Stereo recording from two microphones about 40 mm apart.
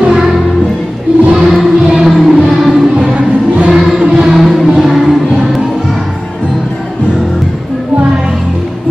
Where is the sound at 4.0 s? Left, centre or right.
Centre.